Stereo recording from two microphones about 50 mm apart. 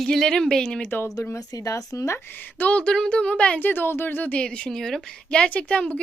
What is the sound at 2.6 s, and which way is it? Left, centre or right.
Speech, left.